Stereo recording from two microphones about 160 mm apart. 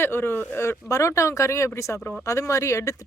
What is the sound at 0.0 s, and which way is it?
A woman's voice, 15° left (ahead or behind).